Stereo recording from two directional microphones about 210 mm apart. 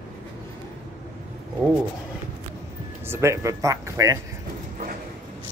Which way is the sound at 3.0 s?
10° right (ahead or behind).